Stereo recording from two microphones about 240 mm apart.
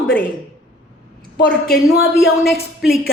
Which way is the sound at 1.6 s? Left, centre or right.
Left.